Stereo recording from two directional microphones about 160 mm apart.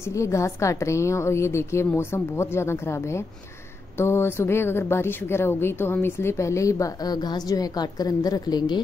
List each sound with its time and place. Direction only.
0.1 s a woman's voice: 20° left (ahead or behind)